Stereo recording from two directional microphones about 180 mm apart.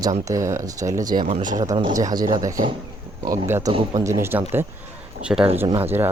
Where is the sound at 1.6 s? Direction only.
25° right (ahead or behind).